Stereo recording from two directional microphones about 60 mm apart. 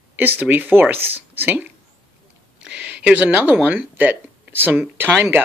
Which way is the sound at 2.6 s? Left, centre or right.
Right.